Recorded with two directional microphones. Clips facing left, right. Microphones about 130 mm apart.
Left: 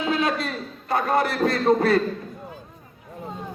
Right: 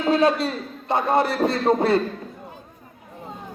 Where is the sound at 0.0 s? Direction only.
35° right (ahead or behind).